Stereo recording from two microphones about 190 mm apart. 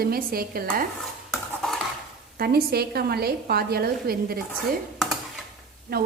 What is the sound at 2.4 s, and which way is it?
A woman's voice, 55° right (ahead or behind).